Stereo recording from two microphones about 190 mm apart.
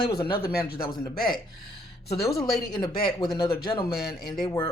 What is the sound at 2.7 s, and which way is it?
Speech, 25° left (ahead or behind).